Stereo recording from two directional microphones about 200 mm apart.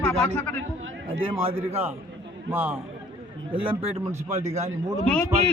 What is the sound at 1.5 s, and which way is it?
Speech, 30° right (ahead or behind).